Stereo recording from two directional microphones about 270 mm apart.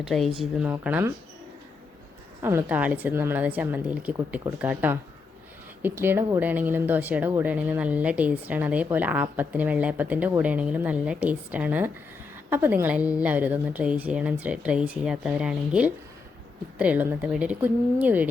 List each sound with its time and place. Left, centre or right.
0.0 s speech: centre
2.4 s a woman's voice: centre